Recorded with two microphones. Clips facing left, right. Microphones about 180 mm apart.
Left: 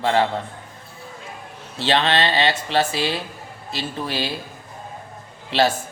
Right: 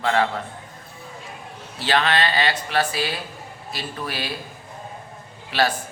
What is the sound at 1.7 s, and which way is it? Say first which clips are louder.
Speech: left 2 dB; 25° left (ahead or behind).